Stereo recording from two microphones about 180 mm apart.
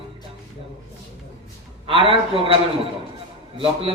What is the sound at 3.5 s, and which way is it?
Speech, 30° right (ahead or behind).